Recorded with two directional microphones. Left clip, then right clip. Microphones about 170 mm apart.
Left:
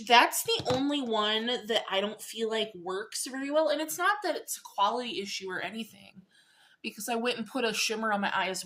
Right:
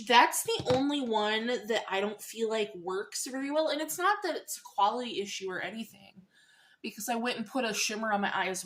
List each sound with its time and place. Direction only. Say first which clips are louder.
0.0 s speech: left 1 dB; 15° left (ahead or behind)